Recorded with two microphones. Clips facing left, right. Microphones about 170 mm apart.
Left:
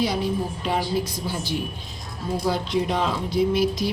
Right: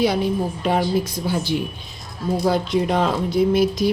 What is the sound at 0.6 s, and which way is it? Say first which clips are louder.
A woman's voice: right 6 dB; 55° right (ahead or behind).